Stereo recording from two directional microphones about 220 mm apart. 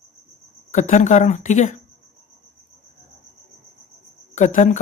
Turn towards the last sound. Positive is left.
turn(degrees=35)  # may be behind; listen again after turning